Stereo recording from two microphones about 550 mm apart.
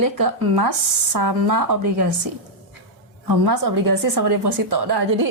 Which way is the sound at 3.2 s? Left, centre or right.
Right.